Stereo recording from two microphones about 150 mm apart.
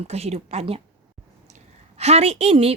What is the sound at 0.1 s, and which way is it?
A woman's voice, 45° right (ahead or behind).